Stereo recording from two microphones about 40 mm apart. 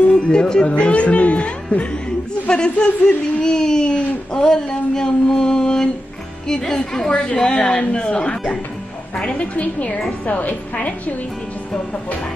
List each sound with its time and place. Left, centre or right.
0.1 s a woman's voice: left
4.0 s speech: left
4.4 s a sound: centre
6.4 s a woman's voice: centre
9.4 s a woman's voice: left